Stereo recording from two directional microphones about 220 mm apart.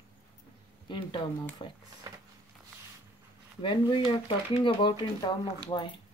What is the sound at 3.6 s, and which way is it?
Speech, 20° left (ahead or behind).